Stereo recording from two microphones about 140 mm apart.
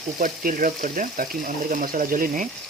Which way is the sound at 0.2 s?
75° right (ahead or behind).